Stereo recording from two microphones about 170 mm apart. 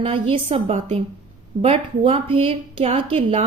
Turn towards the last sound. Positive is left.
turn(degrees=-35)  # may be behind; listen again after turning